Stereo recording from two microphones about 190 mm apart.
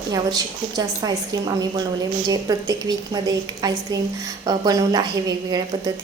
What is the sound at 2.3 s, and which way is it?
A woman's voice, 20° right (ahead or behind).